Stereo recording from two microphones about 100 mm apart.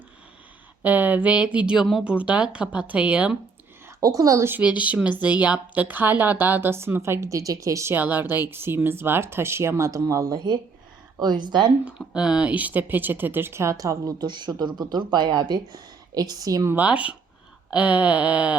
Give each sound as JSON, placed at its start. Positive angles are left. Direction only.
{"t": 0.8, "sound": "speech", "side_deg": -15}
{"t": 4.0, "sound": "speech", "side_deg": -35}
{"t": 5.0, "sound": "a woman's voice", "side_deg": -15}
{"t": 7.9, "sound": "a woman's voice", "side_deg": -20}
{"t": 11.9, "sound": "speech", "side_deg": -10}
{"t": 16.7, "sound": "speech", "side_deg": -15}